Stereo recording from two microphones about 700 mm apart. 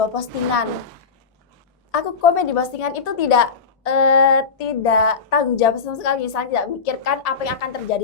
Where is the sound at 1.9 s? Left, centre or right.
Left.